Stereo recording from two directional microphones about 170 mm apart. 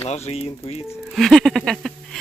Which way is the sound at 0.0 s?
40° left (ahead or behind).